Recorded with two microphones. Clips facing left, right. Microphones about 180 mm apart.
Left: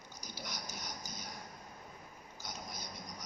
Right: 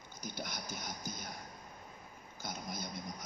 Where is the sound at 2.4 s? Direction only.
55° right (ahead or behind).